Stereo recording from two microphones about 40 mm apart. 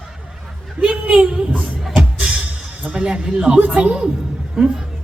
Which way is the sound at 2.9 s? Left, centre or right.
Right.